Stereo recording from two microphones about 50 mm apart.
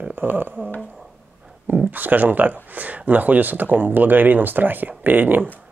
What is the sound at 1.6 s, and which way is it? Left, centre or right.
Speech, right.